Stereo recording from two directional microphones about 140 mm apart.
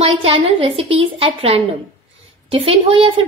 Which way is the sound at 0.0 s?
45° right (ahead or behind).